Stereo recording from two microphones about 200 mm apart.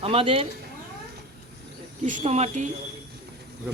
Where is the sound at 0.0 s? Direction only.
30° right (ahead or behind).